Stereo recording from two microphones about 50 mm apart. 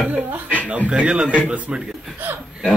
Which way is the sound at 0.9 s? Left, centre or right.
Right.